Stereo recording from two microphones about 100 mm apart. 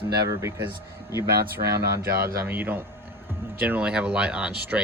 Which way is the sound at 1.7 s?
30° right (ahead or behind).